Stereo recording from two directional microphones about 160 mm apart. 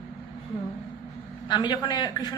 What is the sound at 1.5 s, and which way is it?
Speech, 30° left (ahead or behind).